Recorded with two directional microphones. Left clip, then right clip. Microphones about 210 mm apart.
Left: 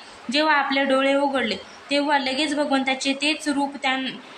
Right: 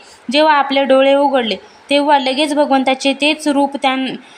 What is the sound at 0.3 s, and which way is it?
A woman's voice, 35° right (ahead or behind).